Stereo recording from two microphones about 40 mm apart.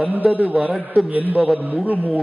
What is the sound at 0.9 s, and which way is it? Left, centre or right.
Speech, right.